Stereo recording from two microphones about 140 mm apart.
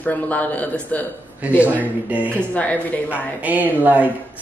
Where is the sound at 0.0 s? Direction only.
10° left (ahead or behind).